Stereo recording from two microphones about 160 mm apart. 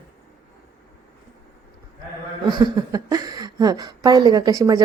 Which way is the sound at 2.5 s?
25° right (ahead or behind).